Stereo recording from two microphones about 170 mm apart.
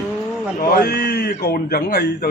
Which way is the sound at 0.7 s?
65° left (ahead or behind).